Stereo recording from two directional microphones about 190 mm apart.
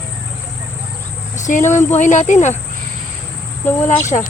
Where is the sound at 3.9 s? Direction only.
40° left (ahead or behind).